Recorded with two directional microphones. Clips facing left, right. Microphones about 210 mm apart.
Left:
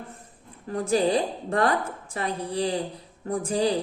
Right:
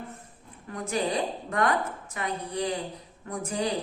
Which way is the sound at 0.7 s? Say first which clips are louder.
Left 6 dB; 35° left (ahead or behind).